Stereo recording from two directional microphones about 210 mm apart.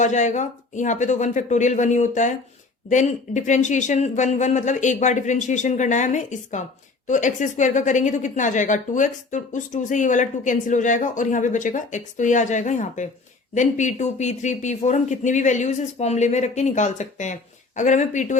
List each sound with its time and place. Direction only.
0.0 s speech: 35° left (ahead or behind)